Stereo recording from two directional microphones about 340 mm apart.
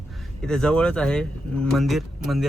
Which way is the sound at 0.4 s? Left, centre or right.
Centre.